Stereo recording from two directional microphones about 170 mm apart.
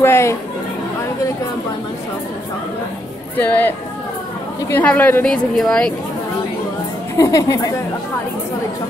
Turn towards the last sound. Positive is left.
turn(degrees=20)  # may be behind; listen again after turning